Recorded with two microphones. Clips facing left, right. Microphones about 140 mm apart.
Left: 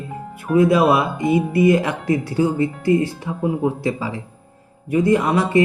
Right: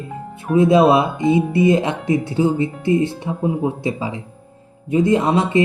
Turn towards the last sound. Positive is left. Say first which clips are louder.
# even
turn(degrees=-20)  # may be behind; listen again after turning